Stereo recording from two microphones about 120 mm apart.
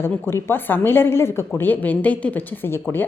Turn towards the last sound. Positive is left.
turn(degrees=20)  # may be behind; listen again after turning